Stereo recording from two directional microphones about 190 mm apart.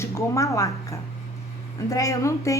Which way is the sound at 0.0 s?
15° left (ahead or behind).